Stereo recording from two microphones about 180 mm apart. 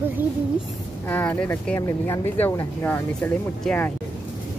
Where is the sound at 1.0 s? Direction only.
10° left (ahead or behind).